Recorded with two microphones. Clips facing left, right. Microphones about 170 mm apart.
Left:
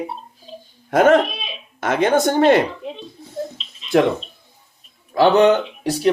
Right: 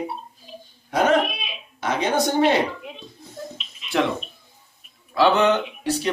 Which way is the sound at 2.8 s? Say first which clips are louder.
Left 7 dB; 30° left (ahead or behind).